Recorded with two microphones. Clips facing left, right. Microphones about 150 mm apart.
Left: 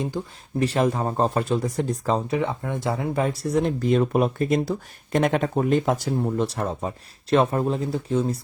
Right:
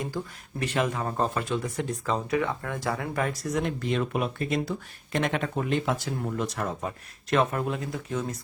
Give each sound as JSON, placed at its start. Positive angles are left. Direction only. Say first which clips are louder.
{"t": 0.6, "sound": "speech", "louder": "left 6 dB", "side_deg": 35}
{"t": 6.2, "sound": "speech", "louder": "left 2 dB", "side_deg": 30}